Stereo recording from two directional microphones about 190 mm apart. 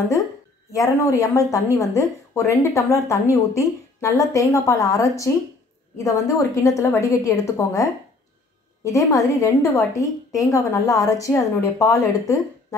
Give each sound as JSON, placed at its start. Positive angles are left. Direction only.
{"t": 0.7, "sound": "a woman's voice", "side_deg": 15}